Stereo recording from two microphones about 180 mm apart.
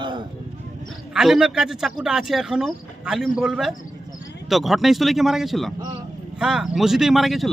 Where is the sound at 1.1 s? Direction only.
Centre (ahead or behind).